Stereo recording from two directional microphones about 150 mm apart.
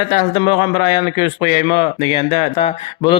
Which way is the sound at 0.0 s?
40° left (ahead or behind).